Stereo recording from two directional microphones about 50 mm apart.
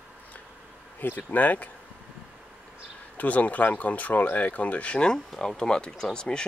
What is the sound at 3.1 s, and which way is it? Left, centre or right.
Speech, left.